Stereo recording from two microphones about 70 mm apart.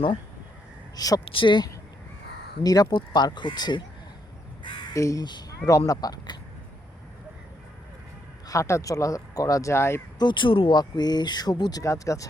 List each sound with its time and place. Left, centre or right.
0.9 s speech: left
4.9 s speech: left
5.2 s speech: left
5.5 s speech: left
8.4 s speech: left
10.2 s speech: left
11.8 s speech: left